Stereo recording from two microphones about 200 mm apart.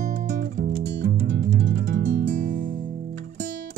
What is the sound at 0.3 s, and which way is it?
Music, 50° right (ahead or behind).